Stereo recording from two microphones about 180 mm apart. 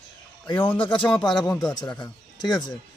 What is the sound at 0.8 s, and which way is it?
Speech, 30° left (ahead or behind).